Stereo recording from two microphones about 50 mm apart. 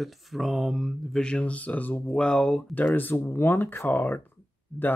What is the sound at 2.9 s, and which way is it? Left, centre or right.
Speech, left.